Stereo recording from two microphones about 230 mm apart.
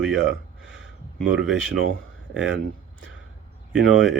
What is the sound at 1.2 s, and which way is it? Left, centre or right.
Speech, centre.